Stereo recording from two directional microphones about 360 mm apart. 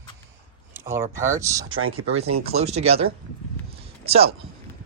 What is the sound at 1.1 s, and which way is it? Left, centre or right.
Speech, centre.